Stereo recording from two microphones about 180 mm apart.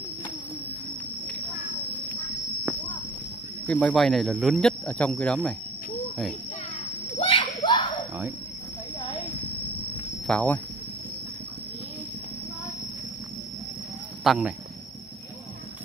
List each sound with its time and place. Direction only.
3.6 s speech: 5° left (ahead or behind)
7.2 s a sound: 30° left (ahead or behind)
10.2 s speech: 10° left (ahead or behind)
14.2 s speech: 5° right (ahead or behind)